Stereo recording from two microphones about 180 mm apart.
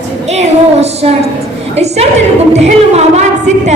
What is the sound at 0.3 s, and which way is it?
A woman's voice, 35° right (ahead or behind).